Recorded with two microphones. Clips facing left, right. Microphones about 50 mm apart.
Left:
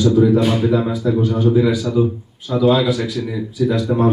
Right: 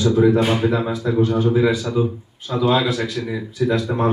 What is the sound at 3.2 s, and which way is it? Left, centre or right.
Speech, right.